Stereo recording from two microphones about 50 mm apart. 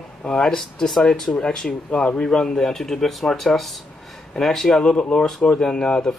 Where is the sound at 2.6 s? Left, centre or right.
Centre.